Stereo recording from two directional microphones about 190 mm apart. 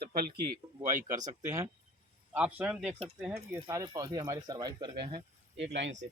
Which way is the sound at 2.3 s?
5° right (ahead or behind).